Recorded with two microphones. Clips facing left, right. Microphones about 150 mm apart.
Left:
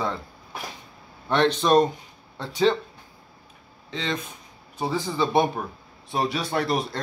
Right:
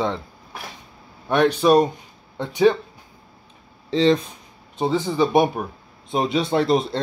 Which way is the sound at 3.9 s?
35° right (ahead or behind).